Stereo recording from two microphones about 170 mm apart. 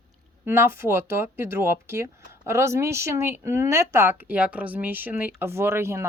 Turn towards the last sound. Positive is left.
turn(degrees=-15)  # may be behind; listen again after turning